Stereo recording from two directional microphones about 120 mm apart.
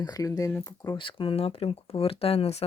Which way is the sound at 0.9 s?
45° left (ahead or behind).